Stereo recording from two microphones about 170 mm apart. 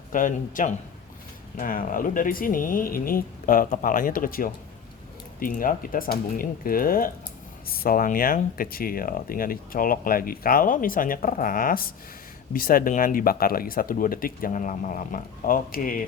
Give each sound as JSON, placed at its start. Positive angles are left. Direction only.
{"t": 0.1, "sound": "speech", "side_deg": 50}